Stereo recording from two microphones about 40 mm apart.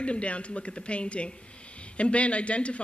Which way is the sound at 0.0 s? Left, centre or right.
Left.